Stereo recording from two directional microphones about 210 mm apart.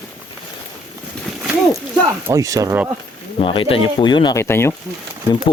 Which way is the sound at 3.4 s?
25° left (ahead or behind).